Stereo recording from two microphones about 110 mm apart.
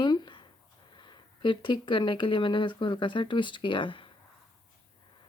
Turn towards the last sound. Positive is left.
turn(degrees=50)  # may be behind; listen again after turning